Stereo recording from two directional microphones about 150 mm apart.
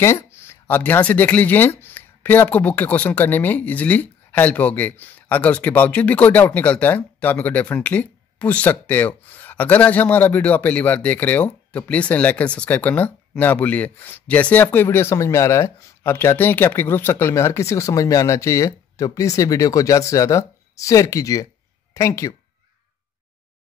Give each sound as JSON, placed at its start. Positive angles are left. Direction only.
{"t": 0.0, "sound": "speech", "side_deg": 15}